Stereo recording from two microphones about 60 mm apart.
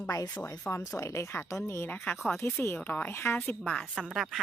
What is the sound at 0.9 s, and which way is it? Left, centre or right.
Speech, left.